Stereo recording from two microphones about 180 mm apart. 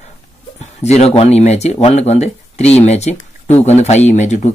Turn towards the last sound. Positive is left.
turn(degrees=40)  # may be behind; listen again after turning